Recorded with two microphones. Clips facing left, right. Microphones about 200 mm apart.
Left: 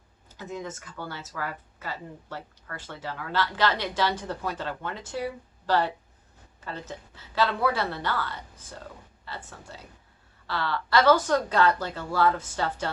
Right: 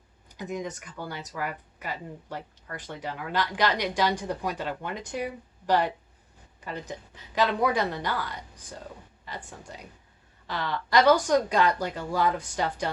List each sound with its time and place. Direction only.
0.3 s speech: 15° right (ahead or behind)